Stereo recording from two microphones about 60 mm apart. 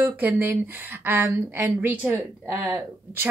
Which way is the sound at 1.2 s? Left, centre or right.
Right.